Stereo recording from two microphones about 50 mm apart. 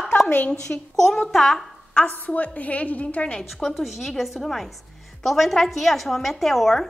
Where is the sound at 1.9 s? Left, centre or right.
Left.